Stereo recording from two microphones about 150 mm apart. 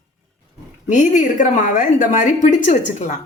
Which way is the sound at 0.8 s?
55° left (ahead or behind).